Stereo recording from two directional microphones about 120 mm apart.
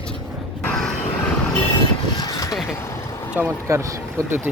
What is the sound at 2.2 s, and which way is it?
Speech, 30° left (ahead or behind).